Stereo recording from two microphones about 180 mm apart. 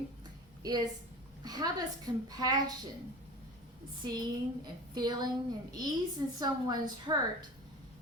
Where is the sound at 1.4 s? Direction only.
20° right (ahead or behind).